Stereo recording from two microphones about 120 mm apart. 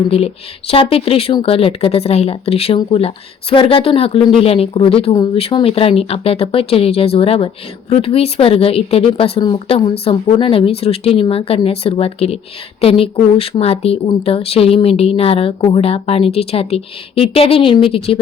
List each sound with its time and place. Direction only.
0.7 s speech: 50° left (ahead or behind)
5.1 s speech: 40° left (ahead or behind)
5.4 s speech: 50° left (ahead or behind)